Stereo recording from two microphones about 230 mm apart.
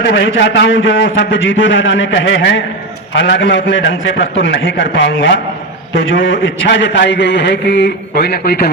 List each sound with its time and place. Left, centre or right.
0.0 s a man's voice: left